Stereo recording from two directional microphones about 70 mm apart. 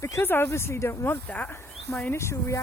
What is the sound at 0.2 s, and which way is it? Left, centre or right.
Speech, left.